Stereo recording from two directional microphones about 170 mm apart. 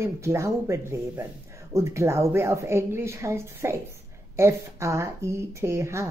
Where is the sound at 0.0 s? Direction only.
15° right (ahead or behind).